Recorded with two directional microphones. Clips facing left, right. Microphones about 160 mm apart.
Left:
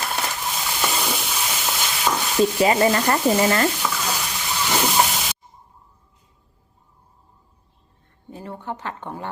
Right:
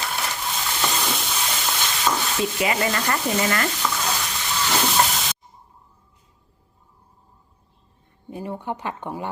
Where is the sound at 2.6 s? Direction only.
35° left (ahead or behind).